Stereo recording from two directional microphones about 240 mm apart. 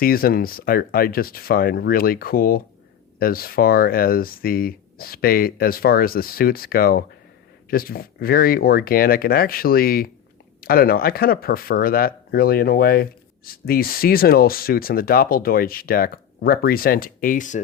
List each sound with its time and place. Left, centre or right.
0.0 s speech: left